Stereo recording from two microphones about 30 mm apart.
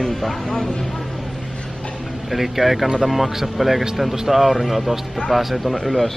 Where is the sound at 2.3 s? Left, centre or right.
Centre.